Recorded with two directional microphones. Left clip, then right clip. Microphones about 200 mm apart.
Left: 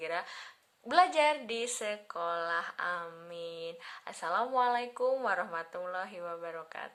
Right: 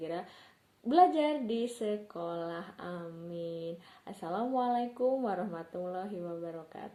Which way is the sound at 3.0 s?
40° left (ahead or behind).